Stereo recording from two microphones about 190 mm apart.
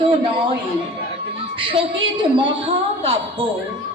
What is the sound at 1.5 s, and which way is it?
A woman's voice, 25° right (ahead or behind).